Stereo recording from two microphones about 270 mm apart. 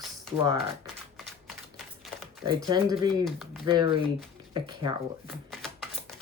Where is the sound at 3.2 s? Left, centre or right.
Centre.